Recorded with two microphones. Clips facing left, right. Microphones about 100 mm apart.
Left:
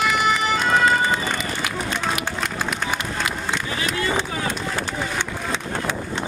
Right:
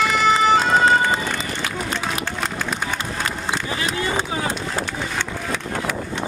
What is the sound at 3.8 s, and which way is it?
Run, 35° right (ahead or behind).